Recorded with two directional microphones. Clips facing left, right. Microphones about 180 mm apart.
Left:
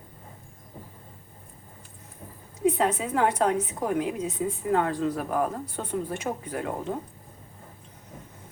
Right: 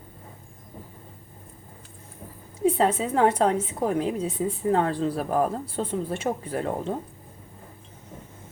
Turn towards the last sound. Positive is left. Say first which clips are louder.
# right 3 dB
turn(degrees=-30)  # may be behind; listen again after turning